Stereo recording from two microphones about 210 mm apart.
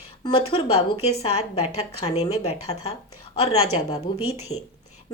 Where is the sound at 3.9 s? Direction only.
30° left (ahead or behind).